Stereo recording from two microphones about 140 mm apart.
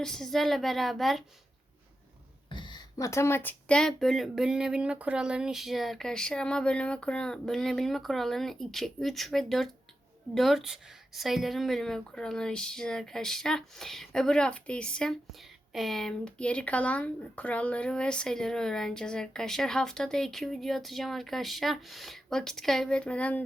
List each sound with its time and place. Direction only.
0.0 s a woman's voice: 5° left (ahead or behind)
2.5 s a sound: 35° left (ahead or behind)
3.1 s a woman's voice: 20° left (ahead or behind)